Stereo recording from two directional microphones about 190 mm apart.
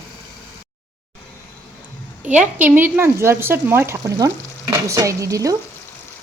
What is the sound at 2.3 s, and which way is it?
Speech, 5° right (ahead or behind).